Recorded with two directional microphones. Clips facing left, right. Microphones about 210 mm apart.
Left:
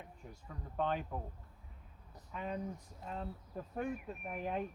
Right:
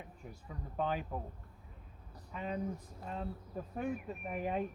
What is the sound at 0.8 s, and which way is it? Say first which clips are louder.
Speech: even; 5° right (ahead or behind).